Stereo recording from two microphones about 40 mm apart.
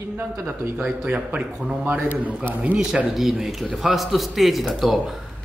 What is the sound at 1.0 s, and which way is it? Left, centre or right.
Speech, right.